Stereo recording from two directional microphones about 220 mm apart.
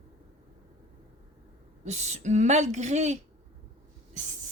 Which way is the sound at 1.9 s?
30° right (ahead or behind).